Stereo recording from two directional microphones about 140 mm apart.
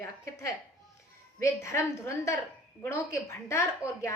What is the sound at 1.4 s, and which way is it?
A woman's voice, 20° left (ahead or behind).